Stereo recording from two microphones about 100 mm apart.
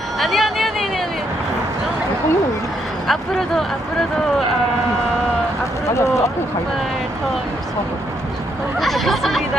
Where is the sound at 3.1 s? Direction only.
Centre (ahead or behind).